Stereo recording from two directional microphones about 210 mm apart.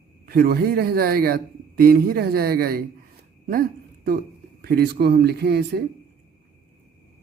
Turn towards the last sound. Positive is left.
turn(degrees=-50)  # may be behind; listen again after turning